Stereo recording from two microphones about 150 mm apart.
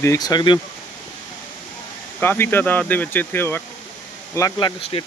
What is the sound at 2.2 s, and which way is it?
Speech, 15° left (ahead or behind).